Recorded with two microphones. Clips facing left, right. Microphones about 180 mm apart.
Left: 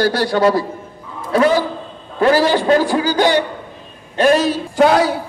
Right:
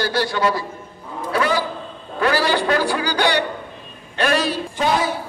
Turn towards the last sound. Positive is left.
turn(degrees=75)  # may be behind; listen again after turning